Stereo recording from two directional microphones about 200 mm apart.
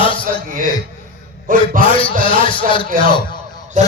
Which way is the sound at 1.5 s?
45° right (ahead or behind).